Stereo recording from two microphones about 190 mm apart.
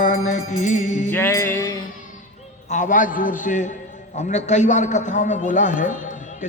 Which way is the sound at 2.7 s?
40° left (ahead or behind).